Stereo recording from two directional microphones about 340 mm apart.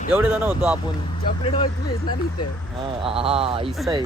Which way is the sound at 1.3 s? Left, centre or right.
Centre.